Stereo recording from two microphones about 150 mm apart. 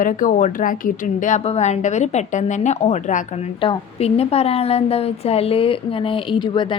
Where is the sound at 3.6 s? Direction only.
40° left (ahead or behind).